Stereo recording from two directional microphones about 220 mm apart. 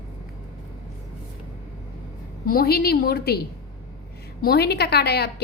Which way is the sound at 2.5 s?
45° left (ahead or behind).